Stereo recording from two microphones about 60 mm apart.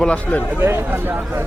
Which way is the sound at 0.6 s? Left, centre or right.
Right.